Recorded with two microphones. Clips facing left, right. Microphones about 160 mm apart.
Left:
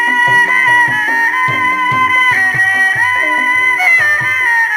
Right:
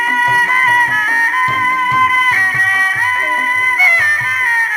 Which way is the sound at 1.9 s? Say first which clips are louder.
Even; 50° left (ahead or behind).